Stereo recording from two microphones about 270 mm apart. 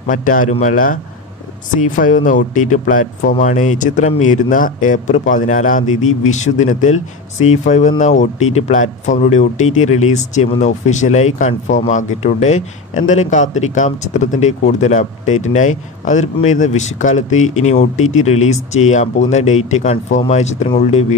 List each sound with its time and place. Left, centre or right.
0.1 s speech: left
2.0 s speech: left